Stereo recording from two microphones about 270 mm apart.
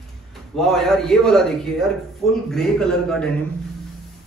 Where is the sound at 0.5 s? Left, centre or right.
Centre.